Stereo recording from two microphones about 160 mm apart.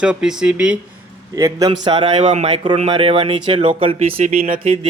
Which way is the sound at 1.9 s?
35° right (ahead or behind).